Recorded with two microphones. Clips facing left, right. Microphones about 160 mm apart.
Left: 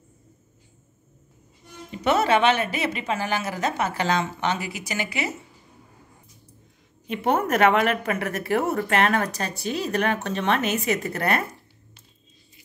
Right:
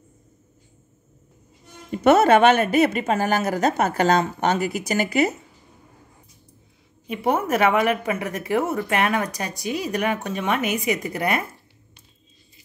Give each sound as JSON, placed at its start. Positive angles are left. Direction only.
{"t": 1.9, "sound": "speech", "side_deg": -50}
{"t": 7.1, "sound": "a woman's voice", "side_deg": -10}